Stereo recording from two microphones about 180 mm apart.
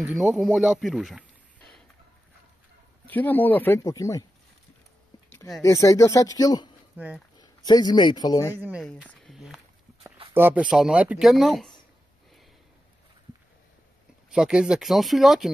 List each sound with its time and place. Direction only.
0.0 s speech: 5° right (ahead or behind)
3.1 s speech: 10° left (ahead or behind)
5.6 s speech: 15° left (ahead or behind)
7.0 s speech: 10° right (ahead or behind)
7.3 s a man's voice: 25° left (ahead or behind)
8.5 s speech: 10° right (ahead or behind)
14.3 s speech: 5° right (ahead or behind)